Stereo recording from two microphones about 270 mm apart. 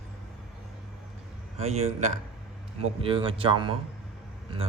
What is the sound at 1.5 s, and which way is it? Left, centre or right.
Speech, right.